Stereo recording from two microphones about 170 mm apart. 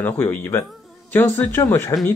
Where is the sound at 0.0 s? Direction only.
15° left (ahead or behind).